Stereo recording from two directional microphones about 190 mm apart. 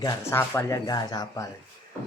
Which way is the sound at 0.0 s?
15° left (ahead or behind).